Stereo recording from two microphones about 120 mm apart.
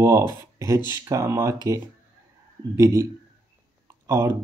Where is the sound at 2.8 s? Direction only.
25° right (ahead or behind).